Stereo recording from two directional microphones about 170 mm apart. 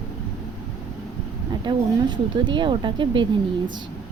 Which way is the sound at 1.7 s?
25° right (ahead or behind).